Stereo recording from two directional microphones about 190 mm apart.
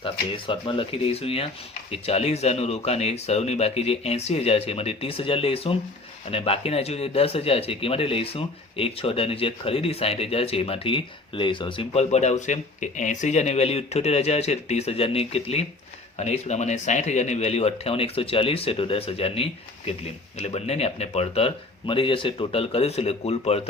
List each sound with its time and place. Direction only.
0.0 s speech: 30° left (ahead or behind)